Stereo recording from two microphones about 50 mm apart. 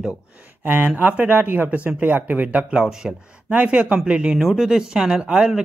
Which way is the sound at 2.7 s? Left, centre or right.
Centre.